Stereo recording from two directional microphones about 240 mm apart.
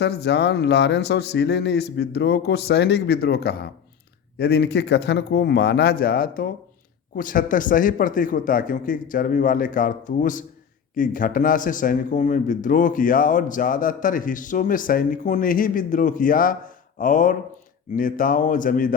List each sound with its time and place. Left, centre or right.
0.0 s speech: left